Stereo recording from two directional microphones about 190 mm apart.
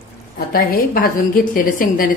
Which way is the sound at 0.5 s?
50° left (ahead or behind).